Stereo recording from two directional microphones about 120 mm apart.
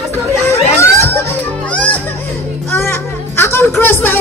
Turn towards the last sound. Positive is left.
turn(degrees=20)  # may be behind; listen again after turning